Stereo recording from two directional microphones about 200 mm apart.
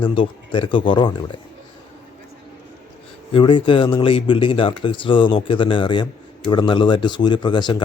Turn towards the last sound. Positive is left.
turn(degrees=25)  # may be behind; listen again after turning